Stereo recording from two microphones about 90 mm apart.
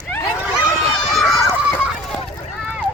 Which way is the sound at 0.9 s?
5° left (ahead or behind).